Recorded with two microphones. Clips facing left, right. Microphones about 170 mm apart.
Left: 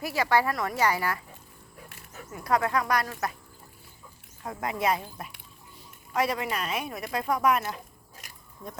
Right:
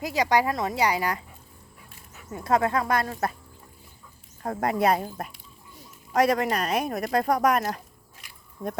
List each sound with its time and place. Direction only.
0.0 s speech: 20° right (ahead or behind)
2.3 s speech: 25° right (ahead or behind)
4.4 s speech: 40° right (ahead or behind)
6.1 s speech: 45° right (ahead or behind)
8.2 s a sound: 45° left (ahead or behind)